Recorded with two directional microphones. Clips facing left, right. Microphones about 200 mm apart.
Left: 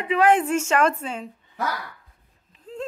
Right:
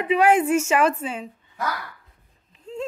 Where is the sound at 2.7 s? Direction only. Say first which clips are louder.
Right 2 dB; 5° left (ahead or behind).